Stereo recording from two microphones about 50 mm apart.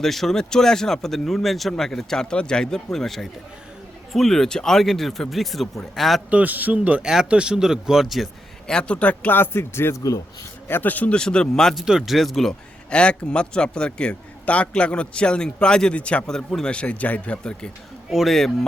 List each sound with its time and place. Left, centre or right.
0.0 s speech: centre
6.3 s a man's voice: right
7.0 s speech: centre
8.6 s speech: centre
9.4 s speech: left
10.7 s speech: left
11.1 s speech: centre
11.9 s speech: centre
12.9 s speech: left
18.3 s speech: centre